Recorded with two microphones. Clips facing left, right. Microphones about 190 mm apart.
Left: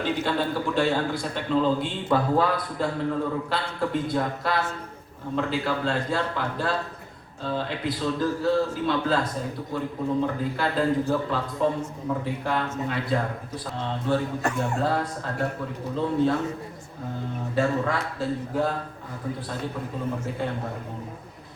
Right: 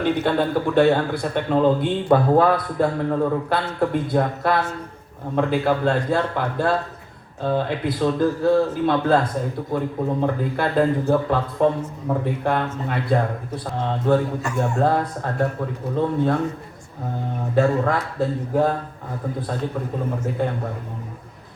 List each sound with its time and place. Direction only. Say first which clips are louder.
0.0 s a man's voice: right 5 dB; 55° right (ahead or behind)
17.5 s a man's voice: right 5 dB; 55° right (ahead or behind)